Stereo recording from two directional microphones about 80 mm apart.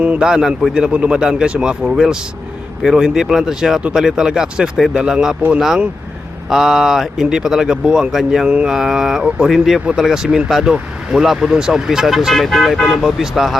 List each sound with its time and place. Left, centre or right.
0.0 s a man's voice: centre
0.3 s speech: centre